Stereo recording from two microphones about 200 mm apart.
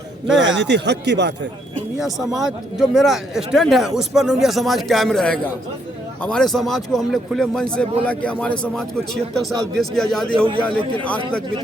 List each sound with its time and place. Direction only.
0.6 s speech: 60° right (ahead or behind)
1.7 s a man's voice: centre (ahead or behind)